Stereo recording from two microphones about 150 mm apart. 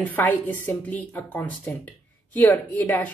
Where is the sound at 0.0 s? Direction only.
10° left (ahead or behind).